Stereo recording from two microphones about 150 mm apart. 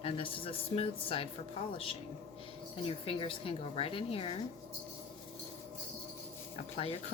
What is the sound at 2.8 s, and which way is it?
A woman's voice, 40° left (ahead or behind).